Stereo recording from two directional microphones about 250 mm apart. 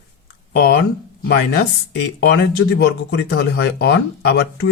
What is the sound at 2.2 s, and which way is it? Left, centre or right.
Speech, left.